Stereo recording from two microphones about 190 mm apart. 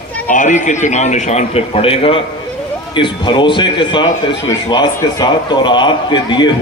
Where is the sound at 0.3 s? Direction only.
40° left (ahead or behind).